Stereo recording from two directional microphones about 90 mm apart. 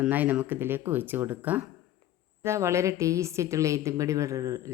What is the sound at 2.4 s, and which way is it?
A woman's voice, 30° right (ahead or behind).